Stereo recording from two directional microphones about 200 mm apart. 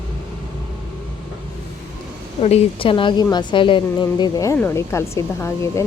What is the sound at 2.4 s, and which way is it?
A woman's voice, 30° left (ahead or behind).